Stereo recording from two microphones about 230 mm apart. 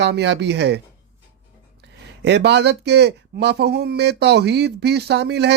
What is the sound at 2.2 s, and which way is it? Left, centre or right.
Speech, right.